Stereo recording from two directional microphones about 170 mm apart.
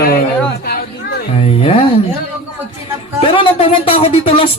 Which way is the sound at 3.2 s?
30° left (ahead or behind).